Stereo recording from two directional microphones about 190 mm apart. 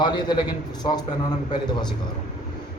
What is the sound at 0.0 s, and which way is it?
A man's voice, 25° left (ahead or behind).